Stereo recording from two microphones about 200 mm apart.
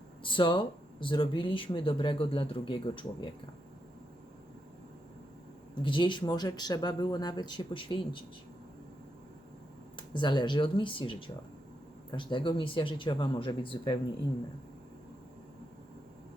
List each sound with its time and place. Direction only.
0.2 s speech: 25° left (ahead or behind)
5.8 s speech: 25° left (ahead or behind)
10.2 s speech: 20° left (ahead or behind)